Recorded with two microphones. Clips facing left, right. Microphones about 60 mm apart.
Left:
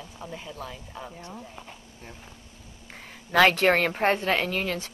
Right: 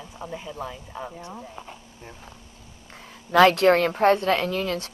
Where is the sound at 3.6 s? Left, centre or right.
Left.